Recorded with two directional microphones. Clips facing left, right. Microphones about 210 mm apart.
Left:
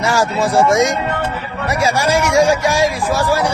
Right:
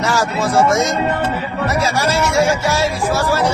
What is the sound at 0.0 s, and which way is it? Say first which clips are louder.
Speech: left 2 dB; 10° left (ahead or behind).